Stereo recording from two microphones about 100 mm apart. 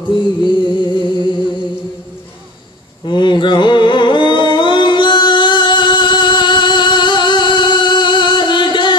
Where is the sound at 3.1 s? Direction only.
50° left (ahead or behind).